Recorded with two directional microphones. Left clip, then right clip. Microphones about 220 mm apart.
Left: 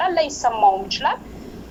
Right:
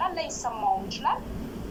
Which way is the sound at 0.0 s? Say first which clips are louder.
Left 10 dB; 45° left (ahead or behind).